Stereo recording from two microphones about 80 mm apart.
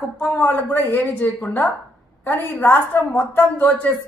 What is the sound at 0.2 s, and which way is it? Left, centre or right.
Speech, left.